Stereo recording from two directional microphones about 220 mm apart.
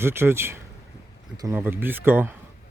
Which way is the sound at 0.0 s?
10° right (ahead or behind).